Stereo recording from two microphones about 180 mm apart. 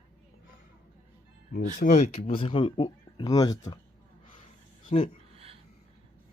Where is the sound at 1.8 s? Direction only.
40° left (ahead or behind); by 3.8 s 20° left (ahead or behind).